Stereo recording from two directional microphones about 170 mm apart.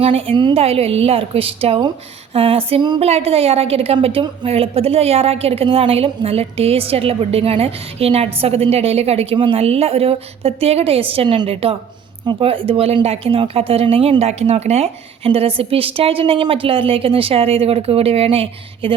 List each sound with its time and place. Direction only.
0.0 s a woman's voice: 35° right (ahead or behind)